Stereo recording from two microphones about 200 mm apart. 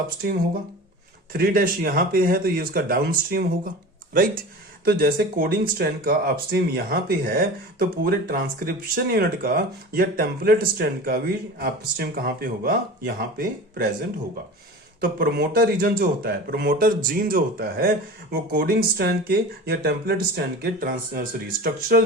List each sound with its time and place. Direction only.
1.3 s speech: 45° right (ahead or behind)
15.0 s speech: 50° right (ahead or behind)